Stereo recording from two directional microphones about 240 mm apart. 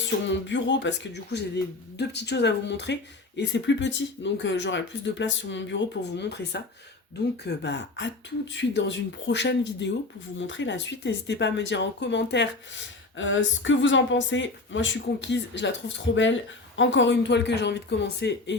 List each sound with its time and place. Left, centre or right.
0.3 s speech: left